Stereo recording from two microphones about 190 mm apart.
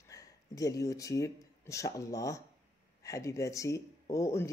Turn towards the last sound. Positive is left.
turn(degrees=15)  # may be behind; listen again after turning